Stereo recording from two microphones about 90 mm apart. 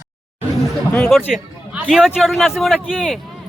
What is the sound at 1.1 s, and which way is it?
A man's voice, centre (ahead or behind).